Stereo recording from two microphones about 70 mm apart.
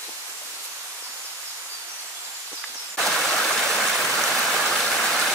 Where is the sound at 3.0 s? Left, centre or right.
Centre.